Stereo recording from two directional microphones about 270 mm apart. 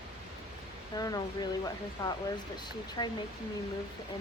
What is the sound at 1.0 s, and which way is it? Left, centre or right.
Speech, centre.